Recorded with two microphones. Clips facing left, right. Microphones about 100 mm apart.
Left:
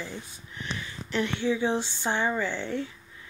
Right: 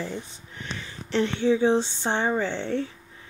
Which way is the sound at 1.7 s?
20° right (ahead or behind).